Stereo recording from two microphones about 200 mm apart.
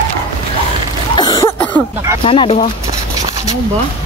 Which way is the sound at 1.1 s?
20° left (ahead or behind).